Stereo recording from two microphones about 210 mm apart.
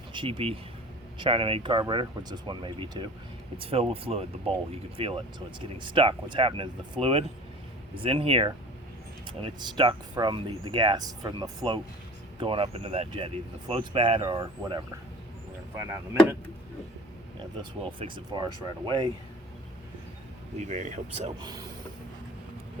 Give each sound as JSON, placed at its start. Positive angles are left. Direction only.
{"t": 0.1, "sound": "speech", "side_deg": -25}
{"t": 15.8, "sound": "speech", "side_deg": -10}
{"t": 17.6, "sound": "speech", "side_deg": -20}
{"t": 20.6, "sound": "speech", "side_deg": -35}
{"t": 21.4, "sound": "speech", "side_deg": -15}